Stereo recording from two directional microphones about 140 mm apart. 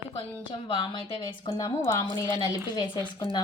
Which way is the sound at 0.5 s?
40° left (ahead or behind).